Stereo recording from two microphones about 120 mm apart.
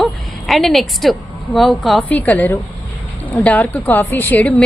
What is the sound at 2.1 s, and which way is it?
A woman's voice, 15° left (ahead or behind).